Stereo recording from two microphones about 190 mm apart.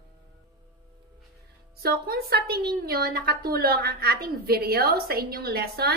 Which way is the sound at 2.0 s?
55° right (ahead or behind).